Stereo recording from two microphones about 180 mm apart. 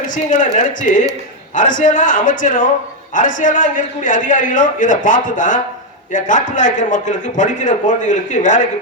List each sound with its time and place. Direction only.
0.1 s a man's voice: 45° left (ahead or behind)